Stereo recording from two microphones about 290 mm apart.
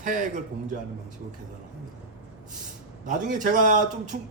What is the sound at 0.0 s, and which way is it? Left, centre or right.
Speech, right.